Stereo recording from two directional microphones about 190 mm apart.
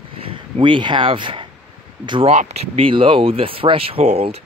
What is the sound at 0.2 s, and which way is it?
Speech, 25° right (ahead or behind).